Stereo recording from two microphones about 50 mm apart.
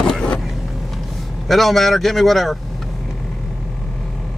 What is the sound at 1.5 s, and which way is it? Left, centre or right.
Speech, centre.